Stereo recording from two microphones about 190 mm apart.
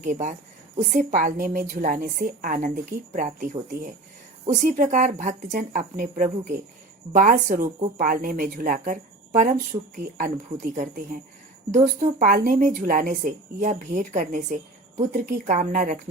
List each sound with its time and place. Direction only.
0.0 s speech: 40° right (ahead or behind)